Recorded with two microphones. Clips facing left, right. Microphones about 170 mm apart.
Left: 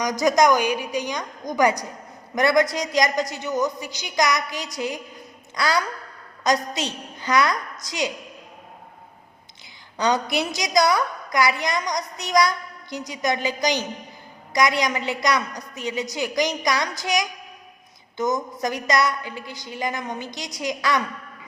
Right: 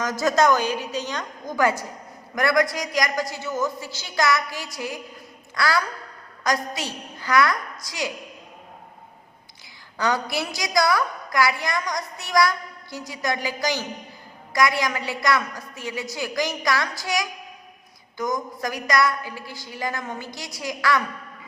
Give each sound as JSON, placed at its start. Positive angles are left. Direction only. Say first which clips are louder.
{"t": 0.0, "sound": "a woman's voice", "louder": "left 2 dB", "side_deg": 15}
{"t": 10.0, "sound": "a woman's voice", "louder": "left 2 dB", "side_deg": 20}